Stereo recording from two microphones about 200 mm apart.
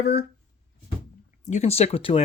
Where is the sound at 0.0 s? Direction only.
55° left (ahead or behind).